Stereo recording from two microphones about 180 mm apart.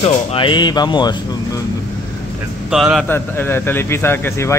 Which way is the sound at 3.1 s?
10° left (ahead or behind).